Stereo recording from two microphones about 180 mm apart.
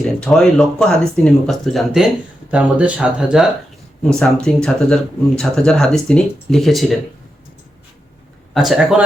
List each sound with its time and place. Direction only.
0.0 s speech: centre (ahead or behind)
8.5 s speech: centre (ahead or behind)